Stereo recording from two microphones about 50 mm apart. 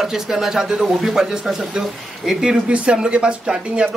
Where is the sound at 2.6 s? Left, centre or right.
Right.